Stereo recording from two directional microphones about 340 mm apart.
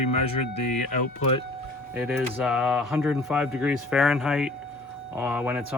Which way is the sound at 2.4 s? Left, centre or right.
Centre.